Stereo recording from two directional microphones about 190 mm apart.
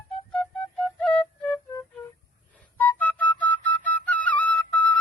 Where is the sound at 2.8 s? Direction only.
10° left (ahead or behind).